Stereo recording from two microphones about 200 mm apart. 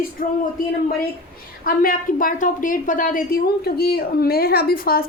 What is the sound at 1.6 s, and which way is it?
A woman's voice, 45° left (ahead or behind).